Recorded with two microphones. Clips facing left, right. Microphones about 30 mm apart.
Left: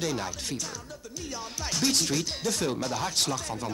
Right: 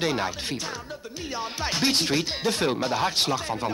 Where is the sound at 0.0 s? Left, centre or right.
Right.